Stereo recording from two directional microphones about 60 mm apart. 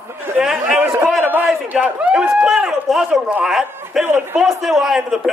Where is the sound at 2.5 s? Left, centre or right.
Centre.